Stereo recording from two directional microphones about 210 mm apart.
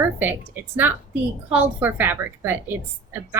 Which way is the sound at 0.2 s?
10° right (ahead or behind).